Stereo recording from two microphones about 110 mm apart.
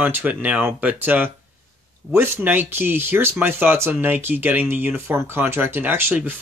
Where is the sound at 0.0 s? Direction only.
15° right (ahead or behind).